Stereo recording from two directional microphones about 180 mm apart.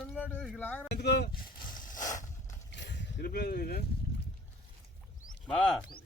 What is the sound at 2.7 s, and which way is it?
Vehicle, 80° left.